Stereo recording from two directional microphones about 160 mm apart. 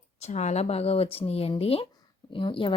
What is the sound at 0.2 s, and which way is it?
A woman's voice, 45° left (ahead or behind).